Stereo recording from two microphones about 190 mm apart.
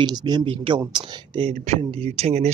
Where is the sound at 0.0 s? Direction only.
20° right (ahead or behind).